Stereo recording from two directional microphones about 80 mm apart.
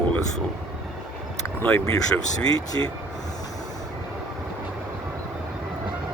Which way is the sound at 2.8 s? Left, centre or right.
Left.